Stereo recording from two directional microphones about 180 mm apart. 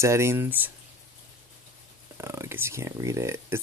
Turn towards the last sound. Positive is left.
turn(degrees=-15)  # may be behind; listen again after turning